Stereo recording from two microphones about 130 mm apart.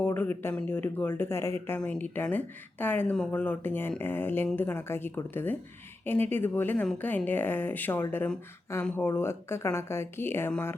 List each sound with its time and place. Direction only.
0.0 s speech: 15° left (ahead or behind)